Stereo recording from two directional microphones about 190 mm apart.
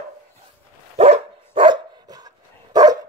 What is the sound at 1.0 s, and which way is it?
Dog, 30° right (ahead or behind).